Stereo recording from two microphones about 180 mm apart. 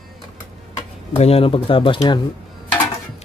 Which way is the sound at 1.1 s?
35° left (ahead or behind).